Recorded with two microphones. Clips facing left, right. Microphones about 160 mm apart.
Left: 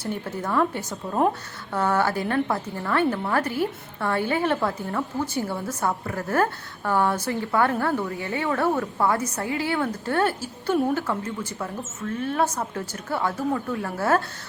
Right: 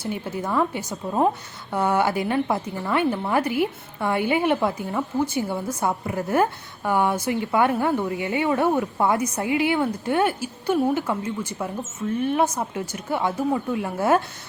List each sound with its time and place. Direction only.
0.0 s a woman's voice: 10° right (ahead or behind)